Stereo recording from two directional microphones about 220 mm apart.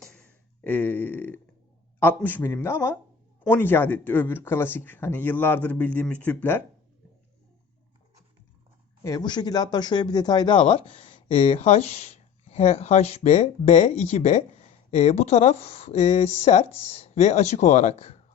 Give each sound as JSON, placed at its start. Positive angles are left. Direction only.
{"t": 0.0, "sound": "a sound", "side_deg": 5}
{"t": 2.0, "sound": "speech", "side_deg": 10}
{"t": 9.0, "sound": "speech", "side_deg": 20}